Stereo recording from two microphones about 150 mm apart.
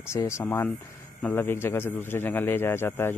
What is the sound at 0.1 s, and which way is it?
A man's voice, 20° left (ahead or behind).